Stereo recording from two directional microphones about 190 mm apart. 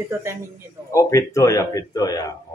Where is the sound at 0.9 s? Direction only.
15° left (ahead or behind).